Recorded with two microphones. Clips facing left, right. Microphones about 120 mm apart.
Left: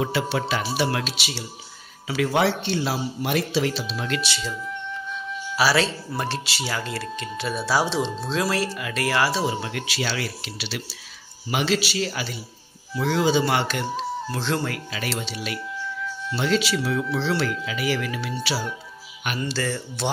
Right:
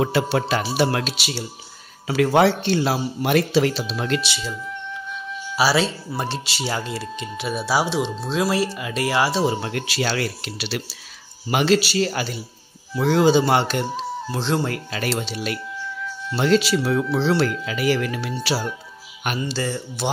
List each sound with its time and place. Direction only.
0.0 s a man's voice: 40° right (ahead or behind)
4.2 s speech: 15° right (ahead or behind)
5.6 s speech: 15° right (ahead or behind)
8.3 s speech: 15° right (ahead or behind)
9.5 s a man's voice: 40° right (ahead or behind)
13.3 s speech: 35° right (ahead or behind)
14.3 s speech: 20° right (ahead or behind)
14.7 s a man's voice: 40° right (ahead or behind)
19.4 s speech: 20° right (ahead or behind)